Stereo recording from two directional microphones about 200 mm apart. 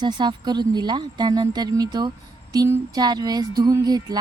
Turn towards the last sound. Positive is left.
turn(degrees=-20)  # may be behind; listen again after turning